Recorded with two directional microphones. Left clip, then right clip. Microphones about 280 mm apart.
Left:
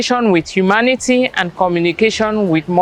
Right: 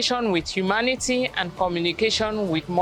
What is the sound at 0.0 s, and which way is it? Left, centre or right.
Speech, left.